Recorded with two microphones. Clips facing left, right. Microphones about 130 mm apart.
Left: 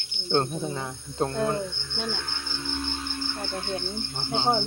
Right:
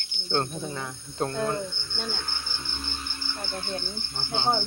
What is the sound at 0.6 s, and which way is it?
Speech, 20° left (ahead or behind).